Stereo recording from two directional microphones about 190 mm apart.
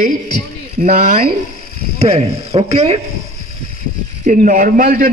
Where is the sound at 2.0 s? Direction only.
30° right (ahead or behind).